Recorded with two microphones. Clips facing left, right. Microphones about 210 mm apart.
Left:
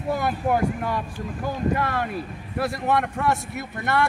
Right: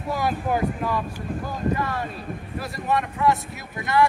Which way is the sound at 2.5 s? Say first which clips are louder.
Left 3 dB; 70° left (ahead or behind).